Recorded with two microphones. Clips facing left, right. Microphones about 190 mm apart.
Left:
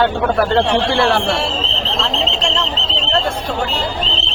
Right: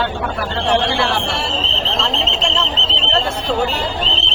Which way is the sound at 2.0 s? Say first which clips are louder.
Left 2 dB; centre (ahead or behind).